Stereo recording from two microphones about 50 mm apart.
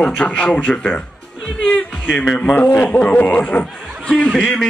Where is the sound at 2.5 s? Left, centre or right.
Left.